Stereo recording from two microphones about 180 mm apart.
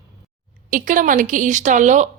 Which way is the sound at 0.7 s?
45° right (ahead or behind).